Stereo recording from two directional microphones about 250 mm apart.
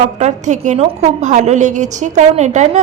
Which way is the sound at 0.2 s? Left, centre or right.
Right.